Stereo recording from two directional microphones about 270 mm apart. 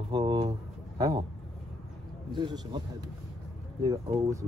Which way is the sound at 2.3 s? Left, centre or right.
Centre.